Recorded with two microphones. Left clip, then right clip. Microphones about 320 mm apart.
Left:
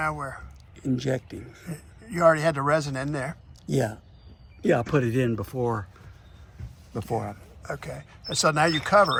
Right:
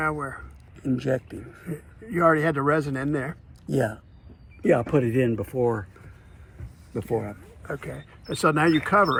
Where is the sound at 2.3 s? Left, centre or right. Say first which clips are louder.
Left 1 dB; left.